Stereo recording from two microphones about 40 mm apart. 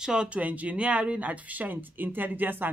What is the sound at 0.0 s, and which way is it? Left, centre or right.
Speech, centre.